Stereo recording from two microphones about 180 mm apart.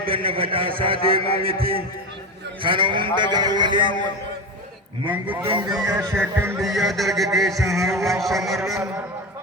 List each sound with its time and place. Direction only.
0.0 s a man's voice: 30° right (ahead or behind)
2.6 s a man's voice: 30° right (ahead or behind)
5.0 s music: 10° right (ahead or behind)
6.6 s speech: centre (ahead or behind)